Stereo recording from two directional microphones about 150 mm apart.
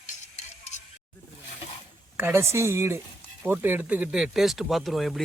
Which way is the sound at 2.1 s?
15° right (ahead or behind).